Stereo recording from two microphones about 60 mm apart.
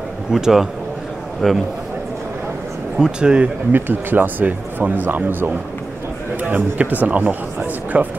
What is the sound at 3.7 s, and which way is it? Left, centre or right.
Speech, right.